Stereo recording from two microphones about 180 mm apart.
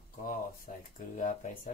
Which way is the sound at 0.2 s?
50° left (ahead or behind).